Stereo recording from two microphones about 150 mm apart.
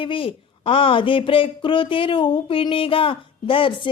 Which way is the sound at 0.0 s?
35° left (ahead or behind).